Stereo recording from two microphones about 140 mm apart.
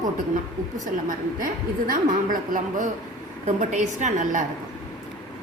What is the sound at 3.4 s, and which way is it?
A woman's voice, 55° right (ahead or behind).